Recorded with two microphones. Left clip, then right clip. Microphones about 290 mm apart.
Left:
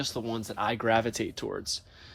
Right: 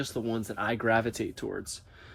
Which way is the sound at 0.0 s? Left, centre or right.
Centre.